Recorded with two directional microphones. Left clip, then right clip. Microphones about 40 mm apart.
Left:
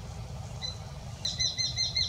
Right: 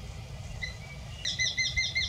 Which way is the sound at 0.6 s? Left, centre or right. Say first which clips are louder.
Even; right.